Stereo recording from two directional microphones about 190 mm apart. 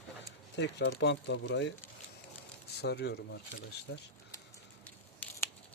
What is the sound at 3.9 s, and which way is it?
Speech, 75° left (ahead or behind).